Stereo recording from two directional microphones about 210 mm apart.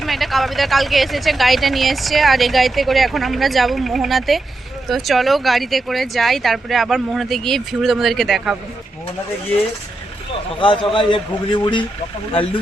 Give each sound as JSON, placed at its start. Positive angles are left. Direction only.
{"t": 0.0, "sound": "speech", "side_deg": 0}
{"t": 10.6, "sound": "speech", "side_deg": 25}